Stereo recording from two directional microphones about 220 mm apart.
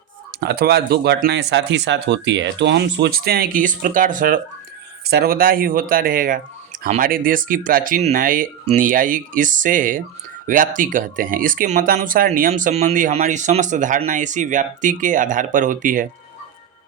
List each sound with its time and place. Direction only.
0.3 s speech: 45° right (ahead or behind)